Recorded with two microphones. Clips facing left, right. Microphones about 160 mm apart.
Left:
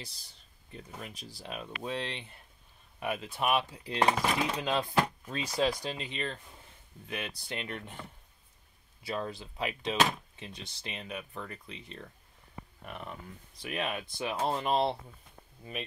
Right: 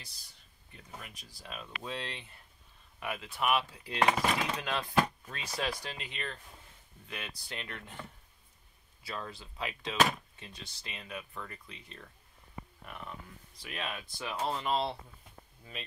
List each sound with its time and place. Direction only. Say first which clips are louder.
0.7 s speech: left 5 dB; 30° left (ahead or behind)
9.0 s speech: left 6 dB; 20° left (ahead or behind)
13.6 s speech: left 5 dB; 20° left (ahead or behind)